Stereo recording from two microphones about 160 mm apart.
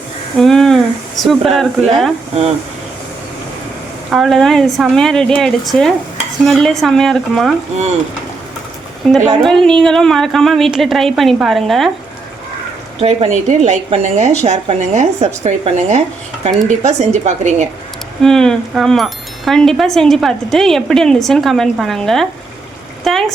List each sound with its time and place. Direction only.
0.3 s speech: centre (ahead or behind)
4.1 s speech: centre (ahead or behind)
9.0 s speech: centre (ahead or behind)
13.0 s a woman's voice: 45° right (ahead or behind)
18.2 s speech: 5° left (ahead or behind)
23.0 s a sound: 5° left (ahead or behind)